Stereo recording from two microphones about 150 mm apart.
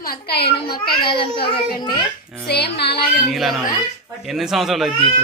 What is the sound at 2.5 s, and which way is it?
Speech, 90° left.